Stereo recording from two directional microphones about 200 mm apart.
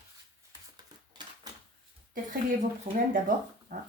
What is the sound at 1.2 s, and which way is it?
Cash register, 20° right (ahead or behind).